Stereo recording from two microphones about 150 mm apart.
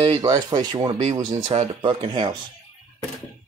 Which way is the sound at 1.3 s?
50° right (ahead or behind).